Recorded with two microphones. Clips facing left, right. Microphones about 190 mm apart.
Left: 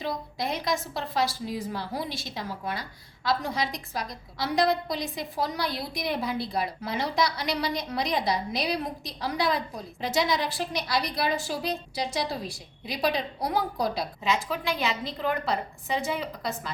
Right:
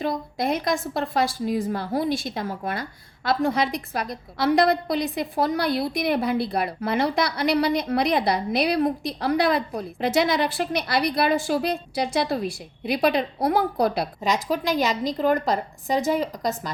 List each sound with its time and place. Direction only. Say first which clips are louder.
0.0 s a woman's voice: right 6 dB; 50° right (ahead or behind)
14.3 s a woman's voice: right 4 dB; 40° right (ahead or behind)